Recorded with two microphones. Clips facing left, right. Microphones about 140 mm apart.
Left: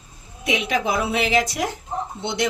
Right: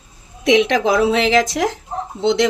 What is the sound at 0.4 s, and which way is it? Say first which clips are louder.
Speech: right 8 dB; 90° right.